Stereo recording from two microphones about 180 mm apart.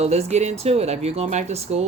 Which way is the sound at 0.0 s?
35° right (ahead or behind).